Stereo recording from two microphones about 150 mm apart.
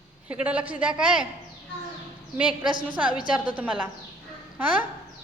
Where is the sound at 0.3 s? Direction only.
10° right (ahead or behind).